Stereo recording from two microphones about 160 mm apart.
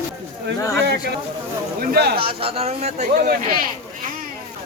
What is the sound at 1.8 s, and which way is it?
Speech, 75° right (ahead or behind).